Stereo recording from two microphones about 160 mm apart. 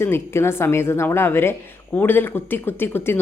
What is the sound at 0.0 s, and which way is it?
Speech, 15° left (ahead or behind).